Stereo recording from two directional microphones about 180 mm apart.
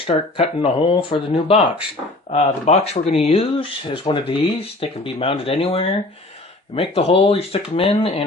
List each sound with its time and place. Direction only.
0.0 s speech: 35° left (ahead or behind)